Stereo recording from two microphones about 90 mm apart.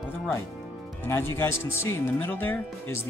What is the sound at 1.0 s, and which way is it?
Speech, 30° left (ahead or behind).